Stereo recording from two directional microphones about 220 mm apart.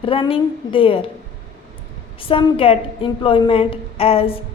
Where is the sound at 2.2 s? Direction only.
25° left (ahead or behind).